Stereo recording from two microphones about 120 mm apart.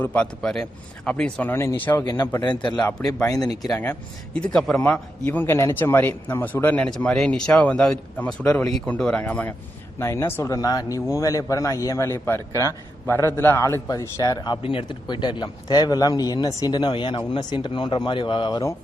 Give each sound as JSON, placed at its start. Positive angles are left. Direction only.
{"t": 0.0, "sound": "a man's voice", "side_deg": 10}
{"t": 2.4, "sound": "speech", "side_deg": 40}
{"t": 4.4, "sound": "a man's voice", "side_deg": 5}